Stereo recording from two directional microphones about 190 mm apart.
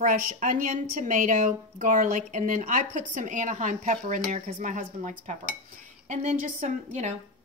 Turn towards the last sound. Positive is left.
turn(degrees=-40)  # may be behind; listen again after turning